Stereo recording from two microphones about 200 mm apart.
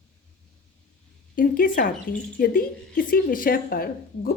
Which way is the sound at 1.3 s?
45° left (ahead or behind).